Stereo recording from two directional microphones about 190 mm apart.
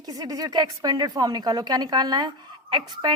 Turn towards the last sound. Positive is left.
turn(degrees=-25)  # may be behind; listen again after turning